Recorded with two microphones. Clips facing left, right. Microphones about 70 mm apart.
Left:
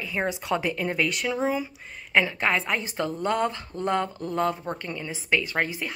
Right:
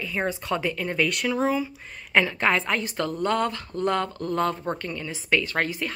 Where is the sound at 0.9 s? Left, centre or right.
Centre.